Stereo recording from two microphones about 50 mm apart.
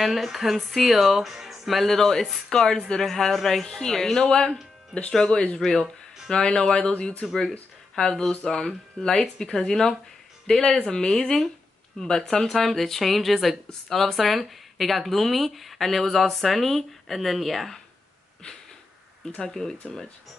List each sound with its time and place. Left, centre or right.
0.0 s speech: centre; by 7.2 s left
7.9 s speech: centre
19.3 s speech: centre